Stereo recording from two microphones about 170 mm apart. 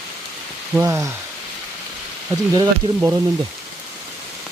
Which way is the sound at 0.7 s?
20° right (ahead or behind).